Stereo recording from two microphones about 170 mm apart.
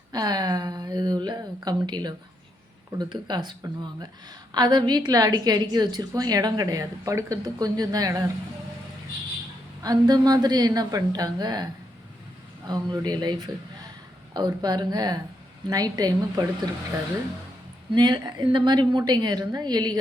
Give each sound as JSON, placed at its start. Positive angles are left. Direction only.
{"t": 0.1, "sound": "a woman's voice", "side_deg": -25}
{"t": 9.8, "sound": "a woman's voice", "side_deg": -20}
{"t": 17.9, "sound": "a woman's voice", "side_deg": -25}